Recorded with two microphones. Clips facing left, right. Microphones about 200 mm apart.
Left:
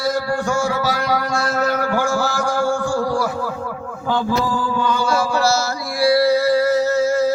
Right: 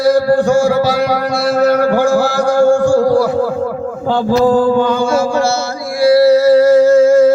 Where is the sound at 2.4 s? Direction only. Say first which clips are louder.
Right 10 dB; 45° right (ahead or behind).